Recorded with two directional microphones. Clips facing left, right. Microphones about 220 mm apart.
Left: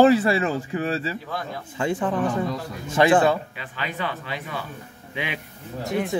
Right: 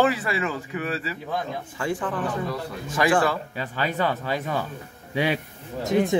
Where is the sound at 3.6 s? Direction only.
40° right (ahead or behind).